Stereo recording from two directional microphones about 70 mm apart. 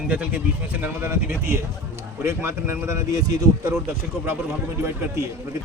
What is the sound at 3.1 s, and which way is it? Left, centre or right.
Speech, right.